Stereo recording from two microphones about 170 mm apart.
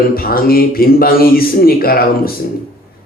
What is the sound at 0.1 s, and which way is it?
A man's voice, 60° left (ahead or behind).